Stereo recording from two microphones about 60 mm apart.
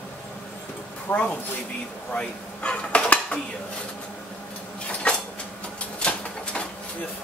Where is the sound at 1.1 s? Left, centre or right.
Left.